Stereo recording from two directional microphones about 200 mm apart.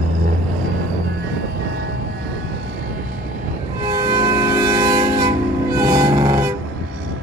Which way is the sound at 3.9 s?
20° right (ahead or behind).